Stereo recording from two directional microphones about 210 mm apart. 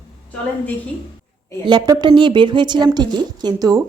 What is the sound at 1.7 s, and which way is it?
A woman's voice, 20° right (ahead or behind).